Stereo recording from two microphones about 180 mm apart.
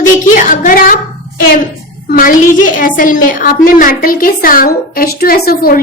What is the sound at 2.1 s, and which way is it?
A woman's voice, 50° left (ahead or behind).